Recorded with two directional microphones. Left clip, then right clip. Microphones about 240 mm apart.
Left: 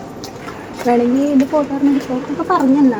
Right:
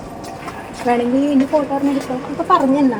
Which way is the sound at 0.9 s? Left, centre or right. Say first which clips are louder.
Left 2 dB; centre.